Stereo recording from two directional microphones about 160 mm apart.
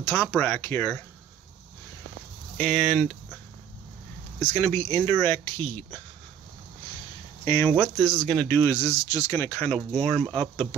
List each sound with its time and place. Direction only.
0.0 s speech: 15° left (ahead or behind)
2.5 s speech: 5° left (ahead or behind)
4.5 s speech: 15° left (ahead or behind)
7.4 s speech: 20° left (ahead or behind)
7.7 s speech: 5° left (ahead or behind)